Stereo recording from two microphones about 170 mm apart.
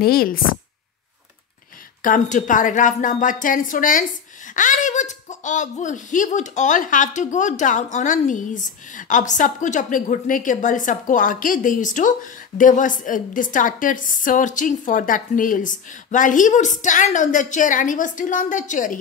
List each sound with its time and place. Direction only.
0.0 s speech: 60° left (ahead or behind)
2.0 s speech: 50° left (ahead or behind)